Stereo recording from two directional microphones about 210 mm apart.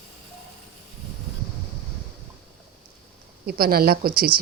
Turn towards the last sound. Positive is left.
turn(degrees=-45)  # may be behind; listen again after turning